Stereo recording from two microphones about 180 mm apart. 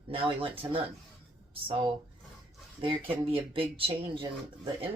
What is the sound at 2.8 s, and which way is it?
Speech, 30° right (ahead or behind).